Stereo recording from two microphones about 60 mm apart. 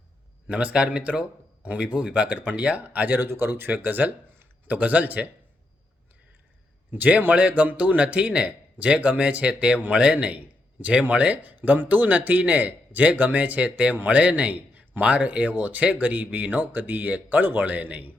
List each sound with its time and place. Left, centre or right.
0.4 s a man's voice: right
3.2 s speech: right
6.9 s a man's voice: right